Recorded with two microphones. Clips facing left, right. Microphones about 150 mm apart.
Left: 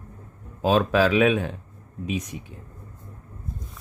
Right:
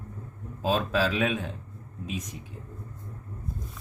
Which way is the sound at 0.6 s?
70° left (ahead or behind).